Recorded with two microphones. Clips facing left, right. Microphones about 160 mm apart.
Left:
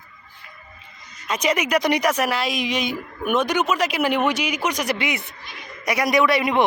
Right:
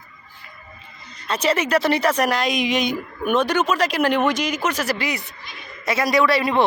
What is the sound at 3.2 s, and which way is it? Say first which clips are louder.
Speech: right 1 dB; 10° left (ahead or behind).